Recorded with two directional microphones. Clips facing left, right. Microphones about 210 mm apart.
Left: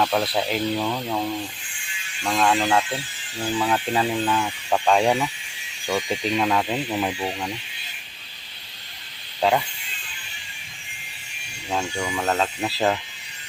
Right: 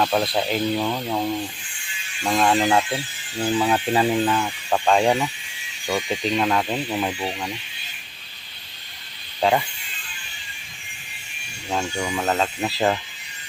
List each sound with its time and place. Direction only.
0.0 s speech: 5° right (ahead or behind)
2.2 s speech: 15° right (ahead or behind)
4.4 s speech: centre (ahead or behind)
9.4 s speech: 5° right (ahead or behind)
11.7 s speech: centre (ahead or behind)